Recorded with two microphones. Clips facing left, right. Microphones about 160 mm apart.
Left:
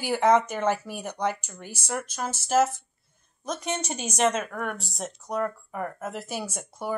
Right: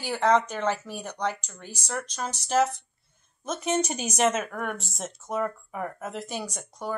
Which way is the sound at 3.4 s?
5° right (ahead or behind).